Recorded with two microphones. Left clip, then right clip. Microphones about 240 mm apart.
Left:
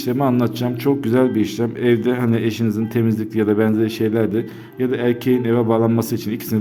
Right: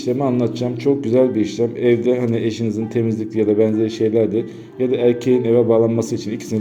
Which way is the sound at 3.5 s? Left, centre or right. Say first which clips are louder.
Right 2 dB; left.